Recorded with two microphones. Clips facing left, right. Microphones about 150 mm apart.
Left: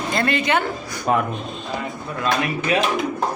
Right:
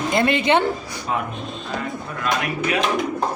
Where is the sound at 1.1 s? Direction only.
65° left (ahead or behind).